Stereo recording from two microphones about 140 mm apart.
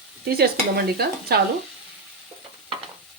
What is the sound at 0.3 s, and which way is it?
Stir, 90° right.